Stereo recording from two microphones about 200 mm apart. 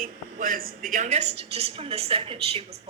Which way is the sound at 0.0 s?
45° right (ahead or behind).